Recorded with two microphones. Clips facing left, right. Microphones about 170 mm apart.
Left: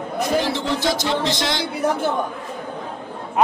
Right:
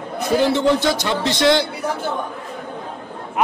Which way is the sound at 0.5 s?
60° right (ahead or behind).